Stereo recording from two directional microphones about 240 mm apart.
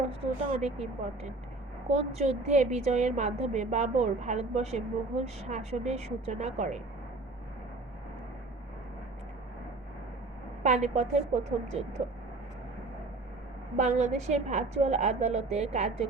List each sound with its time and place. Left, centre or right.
0.1 s a woman's voice: right
10.6 s a woman's voice: right
13.7 s a woman's voice: right